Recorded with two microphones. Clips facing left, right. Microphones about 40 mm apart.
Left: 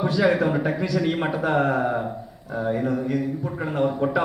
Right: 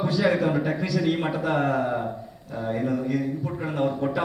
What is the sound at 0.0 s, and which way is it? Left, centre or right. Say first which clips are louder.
A man's voice: left 2 dB; centre.